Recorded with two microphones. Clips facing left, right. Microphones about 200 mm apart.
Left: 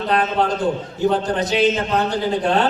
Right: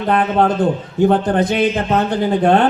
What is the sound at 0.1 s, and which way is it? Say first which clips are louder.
A man's voice: right 5 dB; 55° right (ahead or behind).